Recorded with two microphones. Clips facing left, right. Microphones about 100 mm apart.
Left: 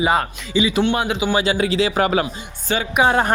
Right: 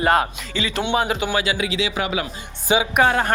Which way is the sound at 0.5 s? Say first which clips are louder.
Left 7 dB; 15° left (ahead or behind).